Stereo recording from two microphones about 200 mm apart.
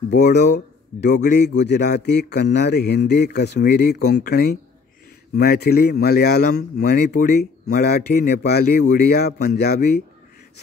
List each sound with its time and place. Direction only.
1.2 s a man's voice: 55° left (ahead or behind)